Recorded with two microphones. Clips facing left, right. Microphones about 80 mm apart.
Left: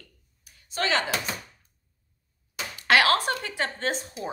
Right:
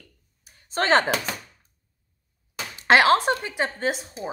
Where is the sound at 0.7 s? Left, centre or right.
Right.